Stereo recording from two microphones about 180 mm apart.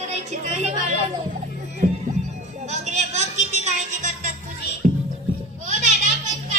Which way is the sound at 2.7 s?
40° right (ahead or behind).